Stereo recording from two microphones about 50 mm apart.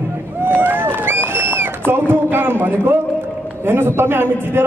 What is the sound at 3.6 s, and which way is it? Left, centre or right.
Speech, right.